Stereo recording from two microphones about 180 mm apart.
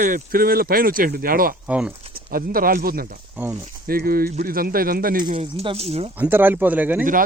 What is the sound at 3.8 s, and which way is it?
Speech, 55° right (ahead or behind).